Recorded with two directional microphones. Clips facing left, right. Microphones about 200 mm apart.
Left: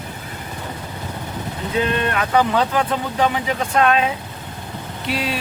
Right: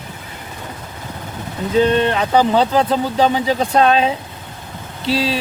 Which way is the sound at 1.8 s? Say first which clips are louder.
Right 6 dB; 30° right (ahead or behind).